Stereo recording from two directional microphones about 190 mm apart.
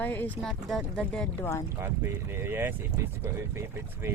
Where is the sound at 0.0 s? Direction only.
10° left (ahead or behind).